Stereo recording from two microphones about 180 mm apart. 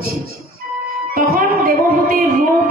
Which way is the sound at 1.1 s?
50° right (ahead or behind).